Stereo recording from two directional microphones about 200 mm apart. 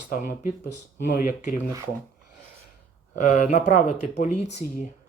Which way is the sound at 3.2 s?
35° left (ahead or behind).